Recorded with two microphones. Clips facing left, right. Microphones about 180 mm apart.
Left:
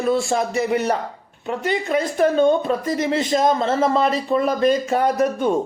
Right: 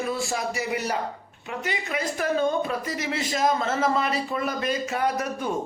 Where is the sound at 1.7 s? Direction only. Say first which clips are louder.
Left 8 dB; 30° left (ahead or behind).